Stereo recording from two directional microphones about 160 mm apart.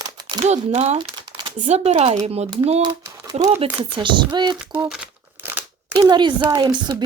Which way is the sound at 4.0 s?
30° right (ahead or behind).